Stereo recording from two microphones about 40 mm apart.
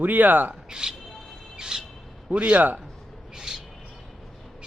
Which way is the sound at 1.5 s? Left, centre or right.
Centre.